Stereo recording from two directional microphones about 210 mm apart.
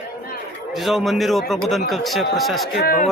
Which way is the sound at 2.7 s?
45° left (ahead or behind).